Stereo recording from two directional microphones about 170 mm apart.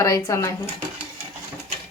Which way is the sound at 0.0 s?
15° left (ahead or behind).